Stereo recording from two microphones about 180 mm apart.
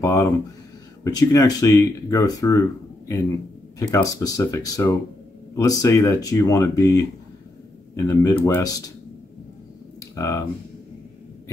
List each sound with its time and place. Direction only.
0.0 s speech: 15° left (ahead or behind)
3.9 s speech: 20° left (ahead or behind)
10.1 s speech: 15° left (ahead or behind)